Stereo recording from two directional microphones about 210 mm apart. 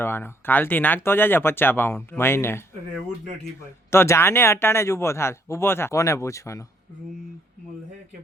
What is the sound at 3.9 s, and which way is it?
Speech, 10° left (ahead or behind).